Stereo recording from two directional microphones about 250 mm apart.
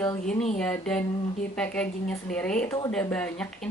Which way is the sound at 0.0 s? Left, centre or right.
Centre.